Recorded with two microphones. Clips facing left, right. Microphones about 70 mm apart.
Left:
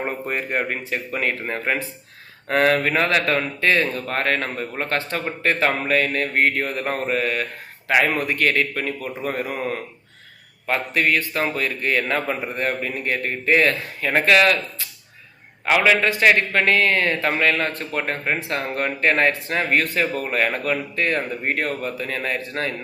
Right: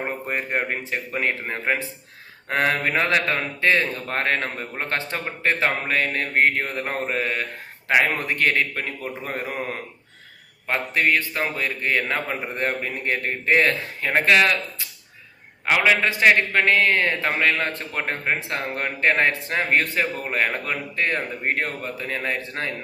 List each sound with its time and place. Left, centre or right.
0.3 s a man's voice: centre
10.7 s a man's voice: right
12.5 s a man's voice: right
15.9 s a man's voice: right